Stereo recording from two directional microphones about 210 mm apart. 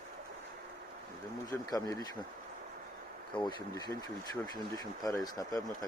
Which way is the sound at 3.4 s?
20° left (ahead or behind).